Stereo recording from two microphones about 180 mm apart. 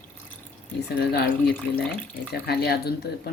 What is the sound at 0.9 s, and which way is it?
Speech, 60° left (ahead or behind).